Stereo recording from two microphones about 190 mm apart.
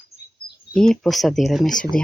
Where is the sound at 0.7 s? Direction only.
5° left (ahead or behind).